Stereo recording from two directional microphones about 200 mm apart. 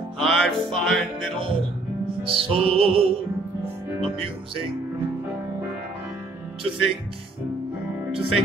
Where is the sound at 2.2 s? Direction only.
25° right (ahead or behind).